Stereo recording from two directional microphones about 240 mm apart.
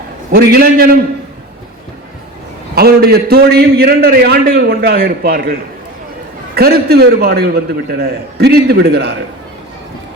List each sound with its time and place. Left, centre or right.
0.3 s a man's voice: right
2.7 s a man's voice: right